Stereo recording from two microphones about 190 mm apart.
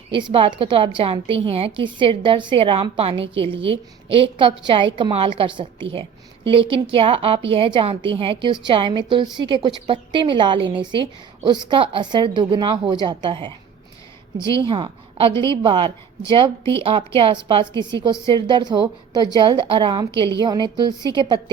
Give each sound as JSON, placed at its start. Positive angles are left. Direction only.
{"t": 0.1, "sound": "a woman's voice", "side_deg": -25}
{"t": 14.4, "sound": "speech", "side_deg": 15}
{"t": 14.7, "sound": "a woman's voice", "side_deg": -25}
{"t": 15.3, "sound": "speech", "side_deg": 15}
{"t": 15.6, "sound": "a woman's voice", "side_deg": -25}